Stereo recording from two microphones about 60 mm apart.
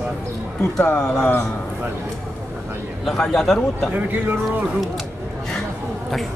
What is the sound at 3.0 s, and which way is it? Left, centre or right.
Speech, centre.